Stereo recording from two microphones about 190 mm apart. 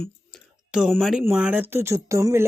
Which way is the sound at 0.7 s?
Centre (ahead or behind).